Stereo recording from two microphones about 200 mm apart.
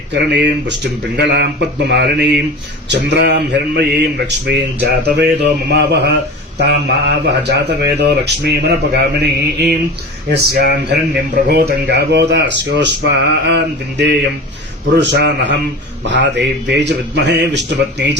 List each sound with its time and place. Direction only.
0.1 s speech: 60° right (ahead or behind)
10.2 s speech: 55° right (ahead or behind)